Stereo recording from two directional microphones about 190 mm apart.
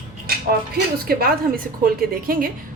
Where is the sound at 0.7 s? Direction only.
50° right (ahead or behind).